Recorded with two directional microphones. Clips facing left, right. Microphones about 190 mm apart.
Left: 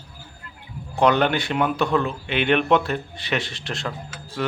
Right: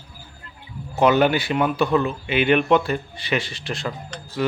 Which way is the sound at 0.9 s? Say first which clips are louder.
Right 2 dB; 5° right (ahead or behind).